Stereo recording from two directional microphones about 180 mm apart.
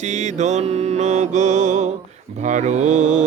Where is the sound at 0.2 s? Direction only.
40° right (ahead or behind).